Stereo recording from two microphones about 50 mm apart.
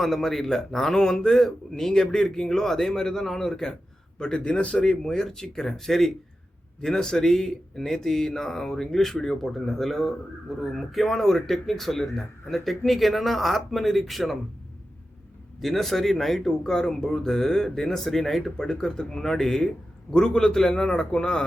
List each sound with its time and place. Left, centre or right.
0.0 s a man's voice: centre; by 4.9 s left
5.0 s speech: centre
15.6 s speech: centre